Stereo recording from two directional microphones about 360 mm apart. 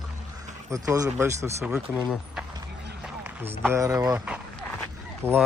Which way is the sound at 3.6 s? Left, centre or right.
Centre.